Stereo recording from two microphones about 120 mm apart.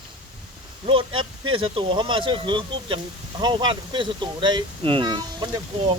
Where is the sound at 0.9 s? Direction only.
45° right (ahead or behind).